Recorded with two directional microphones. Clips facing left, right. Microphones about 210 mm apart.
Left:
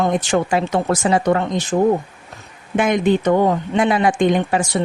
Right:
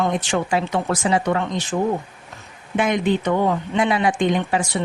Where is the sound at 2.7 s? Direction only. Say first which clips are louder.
Left 3 dB; 45° left (ahead or behind).